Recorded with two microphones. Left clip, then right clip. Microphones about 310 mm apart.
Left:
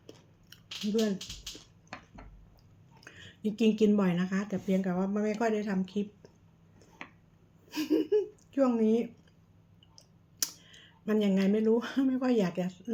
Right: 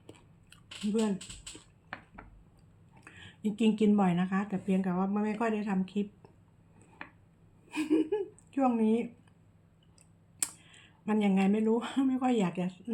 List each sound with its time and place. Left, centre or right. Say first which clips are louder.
3.0 s a woman's voice: left 1 dB; centre
7.7 s gasp: left 2 dB; centre
10.4 s speech: left 4 dB; centre